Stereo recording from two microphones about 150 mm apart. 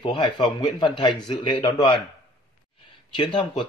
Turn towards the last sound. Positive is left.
turn(degrees=30)  # may be behind; listen again after turning